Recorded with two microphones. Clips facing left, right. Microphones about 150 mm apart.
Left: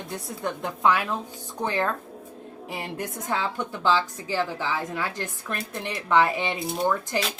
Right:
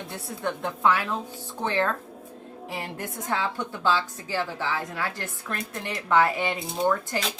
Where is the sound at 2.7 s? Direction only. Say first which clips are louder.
Left 2 dB; 20° left (ahead or behind).